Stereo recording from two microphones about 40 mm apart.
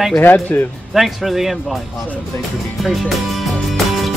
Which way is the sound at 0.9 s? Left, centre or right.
Centre.